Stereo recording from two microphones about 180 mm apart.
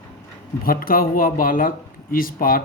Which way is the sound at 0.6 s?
55° left (ahead or behind).